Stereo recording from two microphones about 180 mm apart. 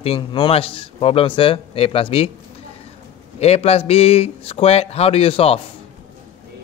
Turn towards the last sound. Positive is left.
turn(degrees=30)  # may be behind; listen again after turning